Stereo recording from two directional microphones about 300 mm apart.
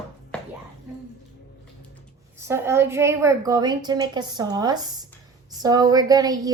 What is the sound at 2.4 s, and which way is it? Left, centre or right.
A woman's voice, centre.